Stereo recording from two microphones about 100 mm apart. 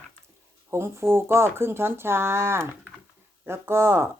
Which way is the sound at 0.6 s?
25° right (ahead or behind).